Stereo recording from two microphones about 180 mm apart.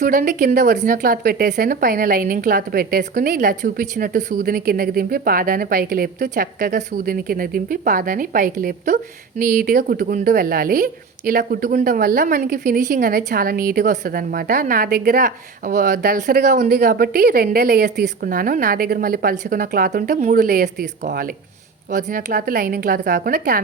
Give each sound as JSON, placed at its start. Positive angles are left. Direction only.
{"t": 0.0, "sound": "a woman's voice", "side_deg": -50}
{"t": 21.9, "sound": "a woman's voice", "side_deg": -50}